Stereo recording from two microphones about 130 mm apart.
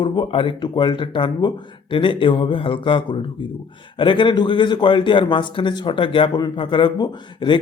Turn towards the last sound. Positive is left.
turn(degrees=35)  # may be behind; listen again after turning